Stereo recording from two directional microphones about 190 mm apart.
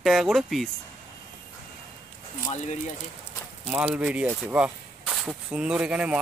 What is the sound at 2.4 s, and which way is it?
Speech, 35° left (ahead or behind).